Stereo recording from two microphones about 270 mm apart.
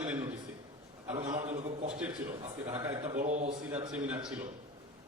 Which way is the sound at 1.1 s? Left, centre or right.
Right.